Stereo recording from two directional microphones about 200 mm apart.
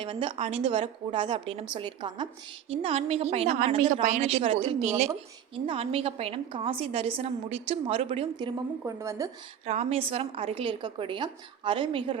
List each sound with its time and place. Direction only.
0.0 s a woman's voice: 25° right (ahead or behind)
8.8 s speech: 15° right (ahead or behind)
9.6 s a woman's voice: 30° right (ahead or behind)